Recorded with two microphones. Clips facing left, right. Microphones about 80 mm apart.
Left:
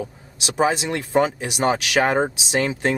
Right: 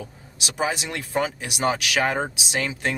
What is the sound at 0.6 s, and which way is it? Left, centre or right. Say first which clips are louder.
Speech: left 6 dB; left.